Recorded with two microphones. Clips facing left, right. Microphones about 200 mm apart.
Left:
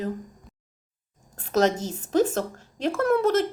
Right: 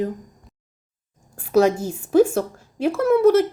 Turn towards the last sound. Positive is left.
turn(degrees=-10)  # may be behind; listen again after turning